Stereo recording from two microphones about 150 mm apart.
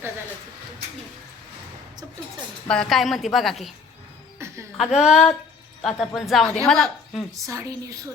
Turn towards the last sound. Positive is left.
turn(degrees=-20)  # may be behind; listen again after turning